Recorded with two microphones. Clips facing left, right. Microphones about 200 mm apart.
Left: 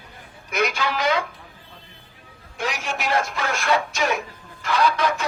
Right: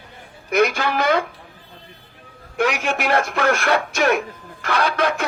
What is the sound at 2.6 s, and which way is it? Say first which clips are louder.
Speech: right 7 dB; 60° right (ahead or behind).